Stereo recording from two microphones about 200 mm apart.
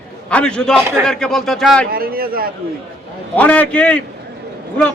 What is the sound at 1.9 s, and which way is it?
Speech, 50° right (ahead or behind).